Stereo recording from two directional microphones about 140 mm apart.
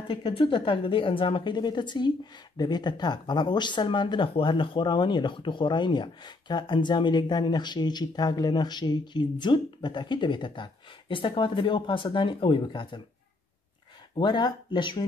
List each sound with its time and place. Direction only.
0.1 s a woman's voice: 40° left (ahead or behind)
14.1 s a woman's voice: 30° left (ahead or behind)